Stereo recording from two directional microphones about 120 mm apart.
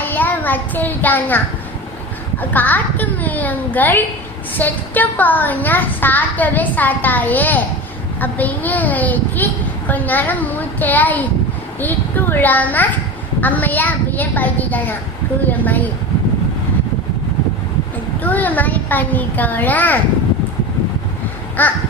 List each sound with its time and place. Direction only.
0.0 s a child's voice: 15° left (ahead or behind)
2.4 s speech: 15° left (ahead or behind)
18.2 s speech: 15° left (ahead or behind)
21.6 s speech: 15° left (ahead or behind)